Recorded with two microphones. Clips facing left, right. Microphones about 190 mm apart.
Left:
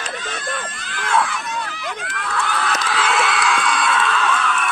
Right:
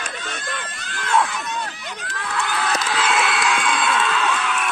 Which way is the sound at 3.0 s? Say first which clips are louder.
Left 1 dB; 20° right (ahead or behind).